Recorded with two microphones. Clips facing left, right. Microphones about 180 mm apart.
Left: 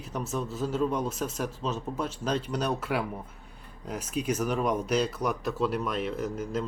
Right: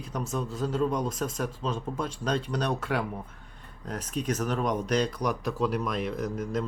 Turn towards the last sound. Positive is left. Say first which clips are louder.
# right 1 dB
turn(degrees=5)  # may be behind; listen again after turning